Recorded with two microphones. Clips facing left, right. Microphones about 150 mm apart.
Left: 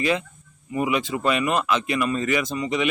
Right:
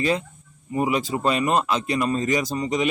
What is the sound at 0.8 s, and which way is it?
Speech, 35° right (ahead or behind).